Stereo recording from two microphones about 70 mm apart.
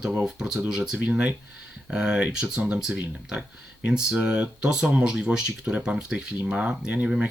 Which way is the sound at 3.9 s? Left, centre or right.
Centre.